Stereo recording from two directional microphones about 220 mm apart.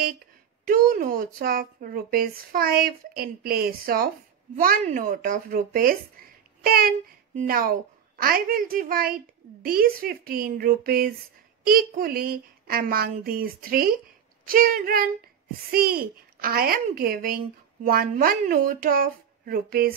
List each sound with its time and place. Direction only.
0.7 s a child's voice: 40° right (ahead or behind)